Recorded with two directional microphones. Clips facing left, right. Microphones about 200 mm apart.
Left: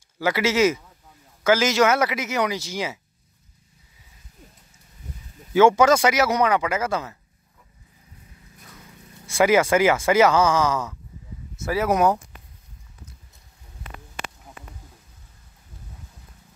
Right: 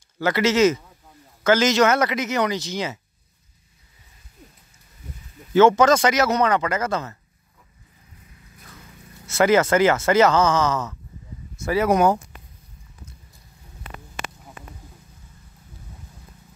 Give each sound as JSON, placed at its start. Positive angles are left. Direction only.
{"t": 0.2, "sound": "speech", "side_deg": 10}
{"t": 5.5, "sound": "speech", "side_deg": 10}
{"t": 9.2, "sound": "speech", "side_deg": 10}